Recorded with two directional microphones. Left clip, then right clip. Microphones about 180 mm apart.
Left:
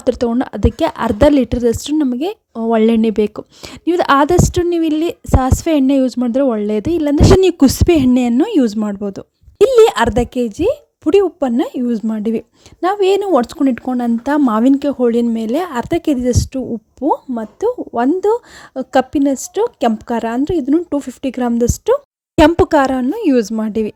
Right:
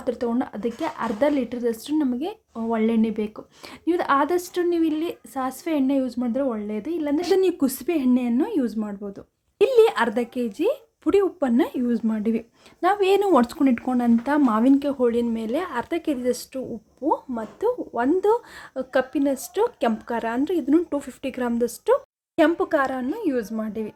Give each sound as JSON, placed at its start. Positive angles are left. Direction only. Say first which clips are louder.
{"t": 0.0, "sound": "a woman's voice", "louder": "left 9 dB", "side_deg": 45}